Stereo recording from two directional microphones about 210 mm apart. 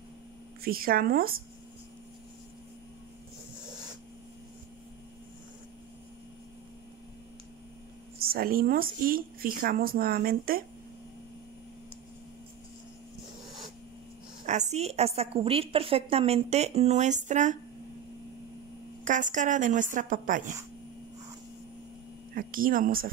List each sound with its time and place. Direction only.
0.6 s speech: 45° right (ahead or behind)
8.2 s speech: 45° right (ahead or behind)
14.4 s a woman's voice: 35° right (ahead or behind)
19.0 s a woman's voice: 35° right (ahead or behind)
22.3 s a woman's voice: 40° right (ahead or behind)